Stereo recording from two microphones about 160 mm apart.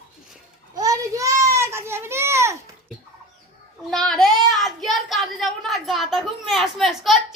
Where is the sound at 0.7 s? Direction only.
20° right (ahead or behind).